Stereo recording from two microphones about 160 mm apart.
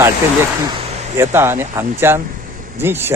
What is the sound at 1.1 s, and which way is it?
A man's voice, 15° right (ahead or behind).